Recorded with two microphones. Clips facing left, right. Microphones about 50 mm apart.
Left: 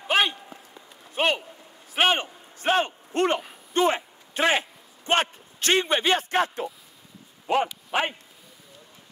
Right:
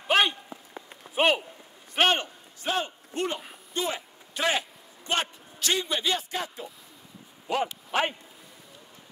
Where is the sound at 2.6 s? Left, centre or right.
Left.